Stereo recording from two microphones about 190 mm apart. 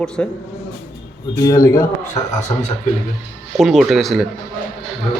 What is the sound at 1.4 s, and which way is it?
Speech, 15° left (ahead or behind).